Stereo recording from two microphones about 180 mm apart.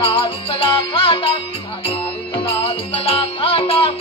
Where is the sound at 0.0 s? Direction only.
30° left (ahead or behind).